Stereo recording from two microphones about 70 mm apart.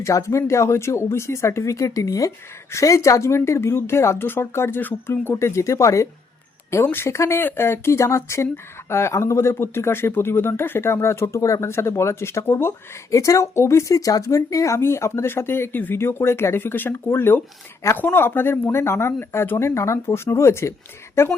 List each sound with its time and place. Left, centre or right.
0.0 s a woman's voice: left
13.1 s a woman's voice: left